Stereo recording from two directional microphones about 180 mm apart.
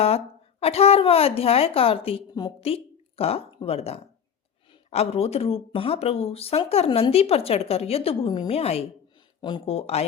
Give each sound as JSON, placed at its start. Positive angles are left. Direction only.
{"t": 0.6, "sound": "speech", "side_deg": 35}